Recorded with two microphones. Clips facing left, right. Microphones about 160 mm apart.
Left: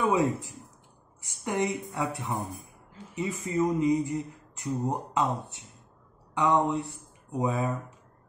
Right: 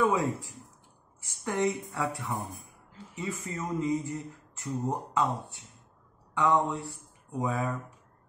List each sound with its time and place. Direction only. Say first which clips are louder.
0.0 s speech: left 1 dB; 20° left (ahead or behind)